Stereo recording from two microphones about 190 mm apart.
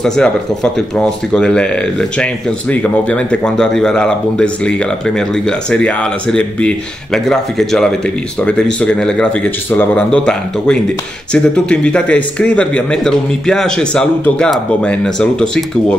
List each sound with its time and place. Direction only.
0.0 s speech: centre (ahead or behind)